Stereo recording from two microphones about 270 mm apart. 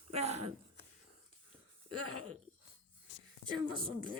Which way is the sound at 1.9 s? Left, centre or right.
Right.